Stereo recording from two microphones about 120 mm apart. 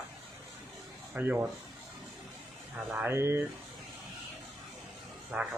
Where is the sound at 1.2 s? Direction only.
15° right (ahead or behind).